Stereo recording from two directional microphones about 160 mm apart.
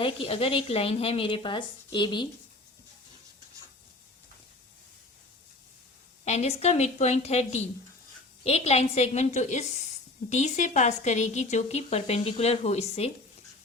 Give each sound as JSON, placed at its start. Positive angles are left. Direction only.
{"t": 0.0, "sound": "speech", "side_deg": 35}
{"t": 6.2, "sound": "a woman's voice", "side_deg": 40}